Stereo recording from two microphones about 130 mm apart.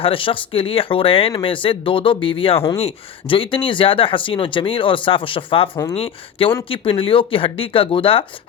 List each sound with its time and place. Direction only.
0.0 s speech: 45° left (ahead or behind)